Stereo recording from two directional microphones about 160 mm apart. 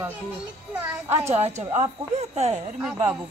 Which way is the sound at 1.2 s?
45° right (ahead or behind).